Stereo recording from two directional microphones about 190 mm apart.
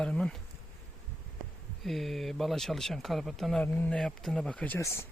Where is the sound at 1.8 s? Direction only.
Centre (ahead or behind).